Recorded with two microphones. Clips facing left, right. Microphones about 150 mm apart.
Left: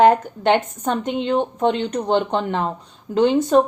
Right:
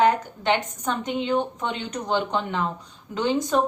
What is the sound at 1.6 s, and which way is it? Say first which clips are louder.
Speech: left 9 dB; 50° left (ahead or behind).